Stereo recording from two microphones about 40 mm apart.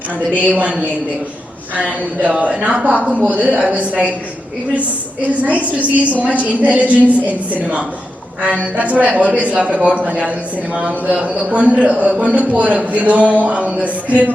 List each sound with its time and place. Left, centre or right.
0.3 s a woman's voice: right
5.2 s a woman's voice: right